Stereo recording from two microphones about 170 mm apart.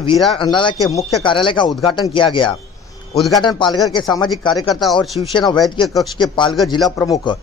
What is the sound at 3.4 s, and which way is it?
A man's voice, 25° left (ahead or behind).